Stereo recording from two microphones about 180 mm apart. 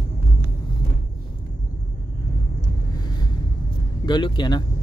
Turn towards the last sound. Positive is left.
turn(degrees=25)  # may be behind; listen again after turning